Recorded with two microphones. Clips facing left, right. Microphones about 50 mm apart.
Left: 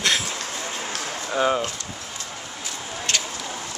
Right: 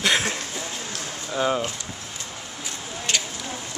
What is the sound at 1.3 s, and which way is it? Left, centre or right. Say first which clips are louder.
Speech: left 2 dB; centre.